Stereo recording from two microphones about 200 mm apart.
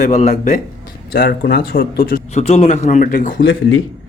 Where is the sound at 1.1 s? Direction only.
50° left (ahead or behind).